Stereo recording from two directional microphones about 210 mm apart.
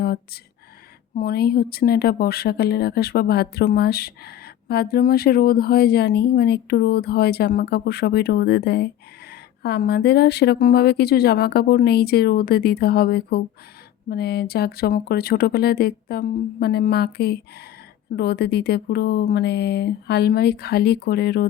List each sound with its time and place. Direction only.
1.1 s speech: 45° left (ahead or behind)